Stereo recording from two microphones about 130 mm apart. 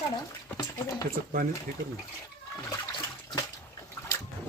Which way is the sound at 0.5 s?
25° left (ahead or behind).